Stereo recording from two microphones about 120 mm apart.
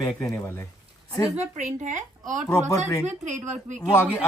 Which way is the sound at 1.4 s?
85° right.